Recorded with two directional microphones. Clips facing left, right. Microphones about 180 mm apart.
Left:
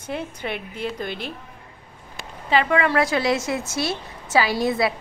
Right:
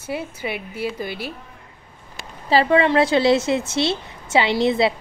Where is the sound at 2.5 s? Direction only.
30° right (ahead or behind).